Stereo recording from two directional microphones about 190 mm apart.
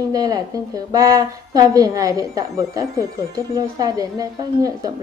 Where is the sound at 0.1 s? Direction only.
20° right (ahead or behind).